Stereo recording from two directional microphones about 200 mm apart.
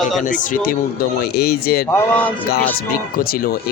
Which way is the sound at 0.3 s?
40° left (ahead or behind).